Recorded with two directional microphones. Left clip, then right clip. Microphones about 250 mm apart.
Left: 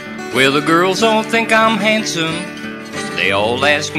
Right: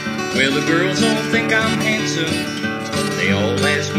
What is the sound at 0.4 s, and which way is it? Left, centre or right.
Music, left.